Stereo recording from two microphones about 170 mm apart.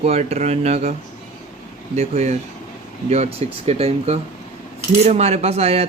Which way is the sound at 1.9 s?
40° right (ahead or behind).